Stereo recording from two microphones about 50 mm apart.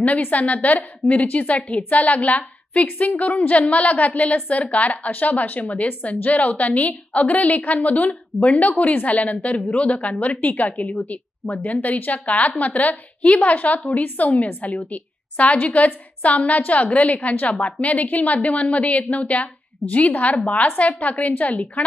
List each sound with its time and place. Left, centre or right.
0.0 s a woman's voice: left
10.3 s a woman's voice: left